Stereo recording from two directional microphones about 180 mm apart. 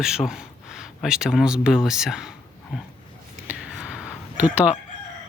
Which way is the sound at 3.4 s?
5° right (ahead or behind).